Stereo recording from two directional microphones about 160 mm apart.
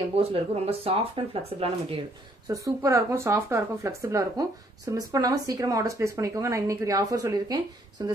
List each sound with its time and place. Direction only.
0.2 s speech: 35° right (ahead or behind)
2.4 s speech: 20° right (ahead or behind)